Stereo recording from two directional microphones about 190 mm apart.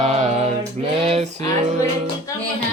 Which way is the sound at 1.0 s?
30° right (ahead or behind).